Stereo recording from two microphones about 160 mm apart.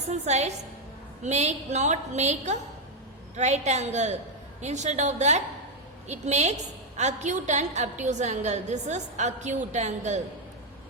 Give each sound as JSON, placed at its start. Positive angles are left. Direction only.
{"t": 0.1, "sound": "a woman's voice", "side_deg": -45}